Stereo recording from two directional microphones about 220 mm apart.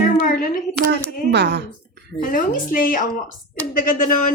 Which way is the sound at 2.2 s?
40° left (ahead or behind).